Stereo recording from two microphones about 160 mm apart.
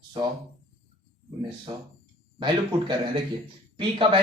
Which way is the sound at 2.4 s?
30° right (ahead or behind).